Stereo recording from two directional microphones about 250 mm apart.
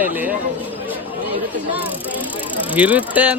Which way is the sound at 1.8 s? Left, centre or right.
Centre.